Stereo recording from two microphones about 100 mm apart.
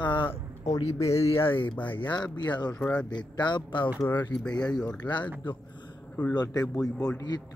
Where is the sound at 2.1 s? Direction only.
45° left (ahead or behind).